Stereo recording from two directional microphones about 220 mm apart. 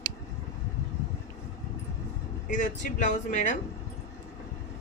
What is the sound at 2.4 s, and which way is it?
Speech, 35° left (ahead or behind).